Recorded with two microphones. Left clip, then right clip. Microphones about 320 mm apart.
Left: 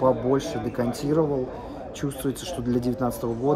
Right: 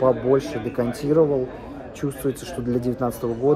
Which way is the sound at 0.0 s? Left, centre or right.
Centre.